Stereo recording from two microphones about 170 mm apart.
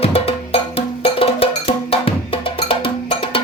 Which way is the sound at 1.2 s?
35° left (ahead or behind).